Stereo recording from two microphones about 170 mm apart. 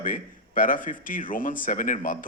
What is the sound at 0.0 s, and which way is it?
Speech, 50° left (ahead or behind).